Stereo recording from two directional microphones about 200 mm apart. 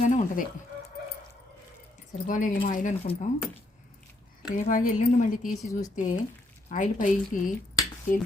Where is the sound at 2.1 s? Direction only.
40° left (ahead or behind).